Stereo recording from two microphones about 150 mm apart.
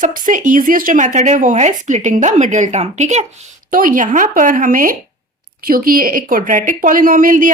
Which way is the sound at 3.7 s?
65° right (ahead or behind).